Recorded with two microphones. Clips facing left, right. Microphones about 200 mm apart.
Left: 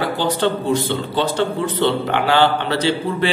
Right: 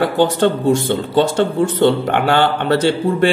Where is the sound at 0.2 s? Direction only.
50° right (ahead or behind).